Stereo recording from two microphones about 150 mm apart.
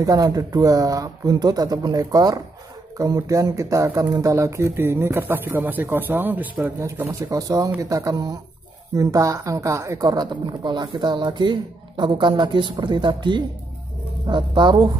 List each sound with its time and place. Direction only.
0.0 s a woman's voice: 25° right (ahead or behind)